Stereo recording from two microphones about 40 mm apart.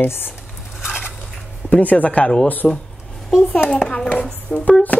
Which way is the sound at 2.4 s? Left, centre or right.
Left.